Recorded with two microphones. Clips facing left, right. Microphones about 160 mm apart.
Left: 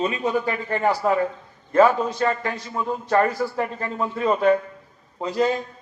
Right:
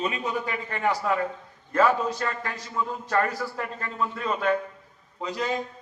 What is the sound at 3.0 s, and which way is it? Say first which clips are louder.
A man's voice: left 7 dB; 25° left (ahead or behind).